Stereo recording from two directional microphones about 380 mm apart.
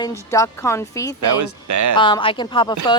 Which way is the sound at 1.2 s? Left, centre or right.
Right.